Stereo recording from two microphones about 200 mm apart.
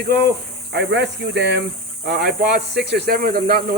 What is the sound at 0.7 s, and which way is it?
Speech, 60° right (ahead or behind).